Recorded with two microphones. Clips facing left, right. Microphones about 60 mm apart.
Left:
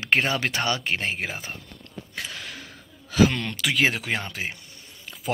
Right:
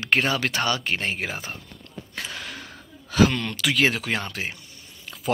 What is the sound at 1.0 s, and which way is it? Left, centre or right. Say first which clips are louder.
Speech: right 1 dB; centre.